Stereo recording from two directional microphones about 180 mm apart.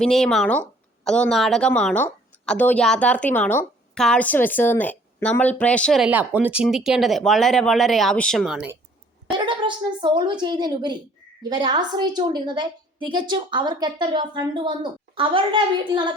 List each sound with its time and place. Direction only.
0.0 s speech: centre (ahead or behind)
6.1 s speech: 10° right (ahead or behind)
9.4 s a woman's voice: 25° right (ahead or behind)